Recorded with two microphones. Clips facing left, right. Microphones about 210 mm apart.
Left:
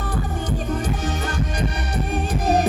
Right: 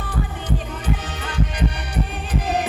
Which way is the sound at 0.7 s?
45° left (ahead or behind).